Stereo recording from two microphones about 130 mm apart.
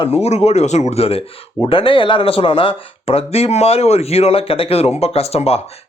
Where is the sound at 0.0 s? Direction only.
55° left (ahead or behind).